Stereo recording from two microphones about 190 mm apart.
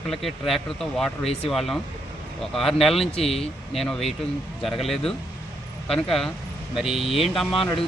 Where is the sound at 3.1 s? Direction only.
30° left (ahead or behind).